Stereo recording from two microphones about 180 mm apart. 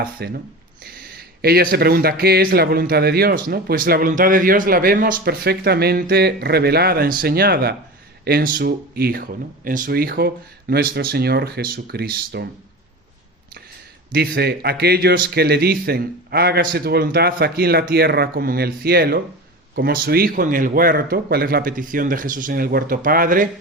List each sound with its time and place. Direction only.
0.0 s a man's voice: 60° right (ahead or behind)
14.1 s a man's voice: 60° right (ahead or behind)